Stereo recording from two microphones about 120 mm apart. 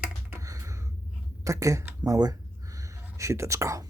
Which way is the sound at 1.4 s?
25° right (ahead or behind).